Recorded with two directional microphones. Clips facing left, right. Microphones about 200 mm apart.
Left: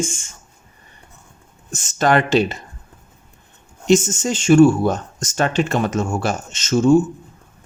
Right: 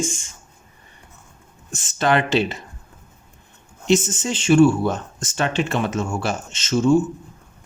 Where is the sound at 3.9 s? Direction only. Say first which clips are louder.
Left 3 dB; 45° left (ahead or behind).